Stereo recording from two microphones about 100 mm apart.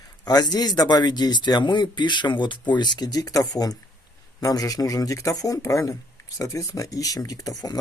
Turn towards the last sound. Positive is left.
turn(degrees=40)  # may be behind; listen again after turning